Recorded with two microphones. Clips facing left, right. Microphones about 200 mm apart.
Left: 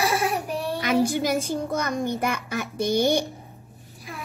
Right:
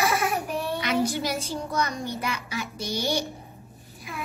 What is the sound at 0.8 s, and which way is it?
A child's voice, 50° left (ahead or behind).